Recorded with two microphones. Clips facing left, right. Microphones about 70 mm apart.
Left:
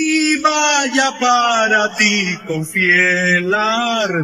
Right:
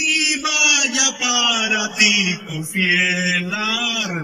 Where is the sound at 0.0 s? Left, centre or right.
Left.